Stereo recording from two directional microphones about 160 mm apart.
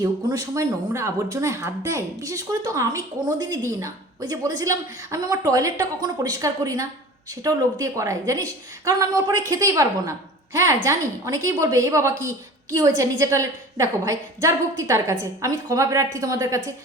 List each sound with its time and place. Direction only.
0.0 s a woman's voice: 20° right (ahead or behind)